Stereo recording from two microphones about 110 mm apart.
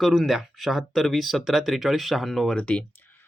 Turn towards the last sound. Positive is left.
turn(degrees=15)  # may be behind; listen again after turning